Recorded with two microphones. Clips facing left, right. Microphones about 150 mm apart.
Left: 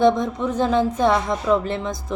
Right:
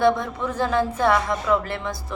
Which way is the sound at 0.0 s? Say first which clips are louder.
Left 3 dB; 15° left (ahead or behind).